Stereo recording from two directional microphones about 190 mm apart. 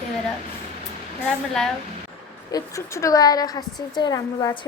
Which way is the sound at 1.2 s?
5° left (ahead or behind).